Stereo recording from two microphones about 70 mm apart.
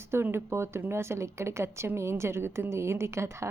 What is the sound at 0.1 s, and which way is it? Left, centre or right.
A woman's voice, right.